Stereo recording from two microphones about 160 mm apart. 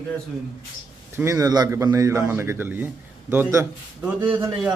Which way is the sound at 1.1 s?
20° right (ahead or behind).